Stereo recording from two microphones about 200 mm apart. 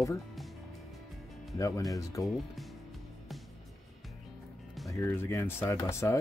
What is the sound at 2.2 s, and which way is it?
Speech, centre (ahead or behind).